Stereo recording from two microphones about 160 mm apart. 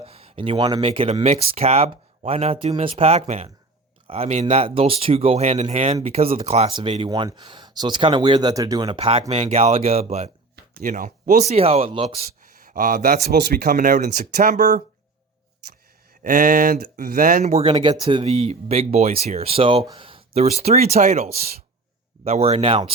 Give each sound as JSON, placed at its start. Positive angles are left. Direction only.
{"t": 0.0, "sound": "speech", "side_deg": -35}
{"t": 10.5, "sound": "a sound", "side_deg": -55}
{"t": 11.4, "sound": "speech", "side_deg": -40}
{"t": 12.4, "sound": "speech", "side_deg": -55}
{"t": 16.2, "sound": "speech", "side_deg": -55}
{"t": 17.4, "sound": "speech", "side_deg": -40}
{"t": 19.8, "sound": "speech", "side_deg": -25}
{"t": 20.1, "sound": "speech", "side_deg": -35}